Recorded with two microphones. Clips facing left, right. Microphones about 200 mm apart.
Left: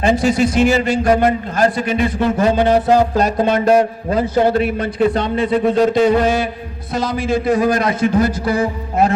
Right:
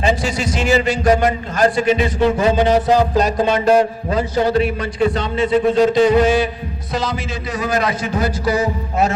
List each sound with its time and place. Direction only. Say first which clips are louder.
0.0 s a man's voice: left 5 dB; 55° left (ahead or behind)